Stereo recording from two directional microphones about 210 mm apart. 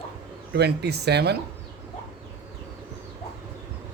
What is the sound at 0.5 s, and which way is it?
Speech, 50° right (ahead or behind).